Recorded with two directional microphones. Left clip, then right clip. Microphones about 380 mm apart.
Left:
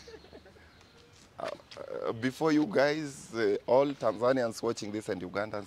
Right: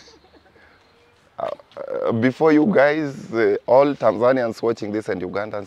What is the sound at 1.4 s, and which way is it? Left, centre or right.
Speech, right.